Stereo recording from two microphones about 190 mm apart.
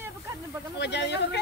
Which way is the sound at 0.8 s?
65° left (ahead or behind).